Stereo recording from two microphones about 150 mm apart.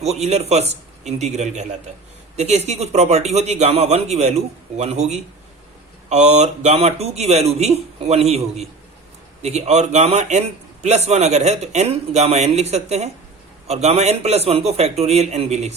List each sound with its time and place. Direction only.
0.0 s a man's voice: 45° right (ahead or behind)